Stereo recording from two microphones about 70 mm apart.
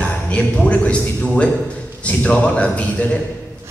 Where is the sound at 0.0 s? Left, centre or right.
Centre.